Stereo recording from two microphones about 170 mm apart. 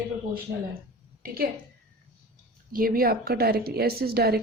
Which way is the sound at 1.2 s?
60° right (ahead or behind).